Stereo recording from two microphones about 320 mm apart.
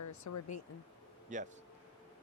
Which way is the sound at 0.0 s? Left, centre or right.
Left.